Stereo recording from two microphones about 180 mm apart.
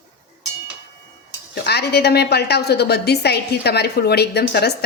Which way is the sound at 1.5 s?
65° left (ahead or behind).